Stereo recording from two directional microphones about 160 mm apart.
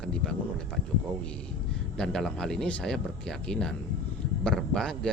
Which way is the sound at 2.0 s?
5° left (ahead or behind).